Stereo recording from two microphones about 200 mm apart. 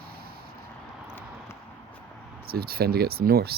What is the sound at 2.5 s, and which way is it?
Speech, 50° right (ahead or behind).